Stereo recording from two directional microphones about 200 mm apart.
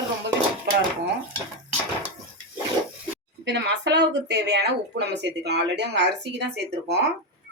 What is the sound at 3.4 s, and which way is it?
Speech, 60° right (ahead or behind).